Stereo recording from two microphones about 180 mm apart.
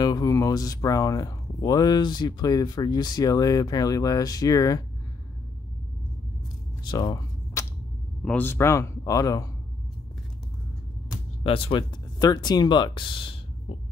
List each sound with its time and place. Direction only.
0.0 s speech: 20° left (ahead or behind)
6.8 s a sound: 25° left (ahead or behind)
8.2 s speech: 10° left (ahead or behind)
11.4 s speech: 30° left (ahead or behind)